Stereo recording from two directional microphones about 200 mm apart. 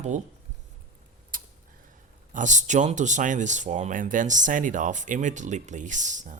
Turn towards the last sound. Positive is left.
turn(degrees=-40)  # may be behind; listen again after turning